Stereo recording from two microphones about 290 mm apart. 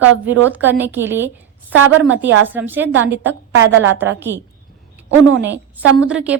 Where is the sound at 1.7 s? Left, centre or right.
Right.